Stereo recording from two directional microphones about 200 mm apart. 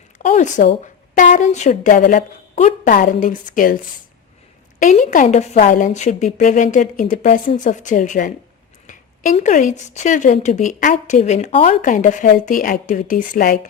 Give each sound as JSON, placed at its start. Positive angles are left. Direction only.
{"t": 0.2, "sound": "speech", "side_deg": 40}
{"t": 4.8, "sound": "speech", "side_deg": 40}